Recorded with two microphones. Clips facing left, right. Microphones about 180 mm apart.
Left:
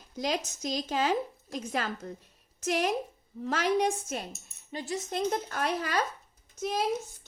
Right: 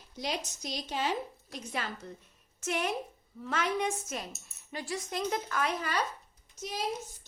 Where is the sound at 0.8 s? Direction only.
90° left.